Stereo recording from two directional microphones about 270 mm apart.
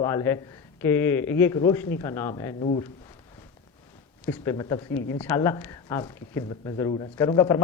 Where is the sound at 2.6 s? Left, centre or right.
Left.